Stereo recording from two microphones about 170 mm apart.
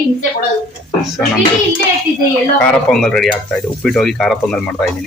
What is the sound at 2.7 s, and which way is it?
Speech, 5° left (ahead or behind).